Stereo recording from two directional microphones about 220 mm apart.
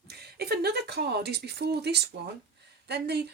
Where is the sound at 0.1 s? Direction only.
45° right (ahead or behind).